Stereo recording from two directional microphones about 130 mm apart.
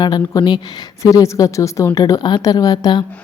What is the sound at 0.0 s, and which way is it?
A woman's voice, 35° left (ahead or behind).